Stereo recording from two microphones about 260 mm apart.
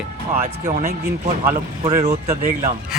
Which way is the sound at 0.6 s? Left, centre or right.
Right.